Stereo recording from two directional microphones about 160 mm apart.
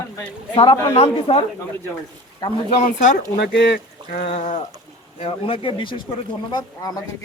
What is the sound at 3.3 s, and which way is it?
Speech, 90° left.